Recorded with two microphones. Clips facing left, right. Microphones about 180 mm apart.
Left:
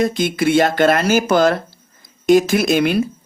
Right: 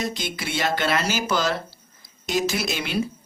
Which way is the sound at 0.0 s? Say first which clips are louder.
Left 12 dB; 55° left (ahead or behind).